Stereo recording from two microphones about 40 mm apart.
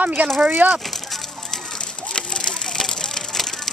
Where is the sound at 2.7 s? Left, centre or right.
Centre.